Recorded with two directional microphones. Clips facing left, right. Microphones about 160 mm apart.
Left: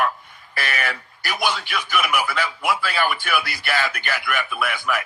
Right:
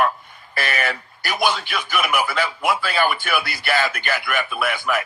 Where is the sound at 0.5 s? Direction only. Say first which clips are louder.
Right 3 dB; 25° right (ahead or behind).